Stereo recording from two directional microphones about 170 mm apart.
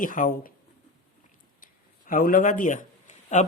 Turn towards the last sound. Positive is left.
turn(degrees=45)  # may be behind; listen again after turning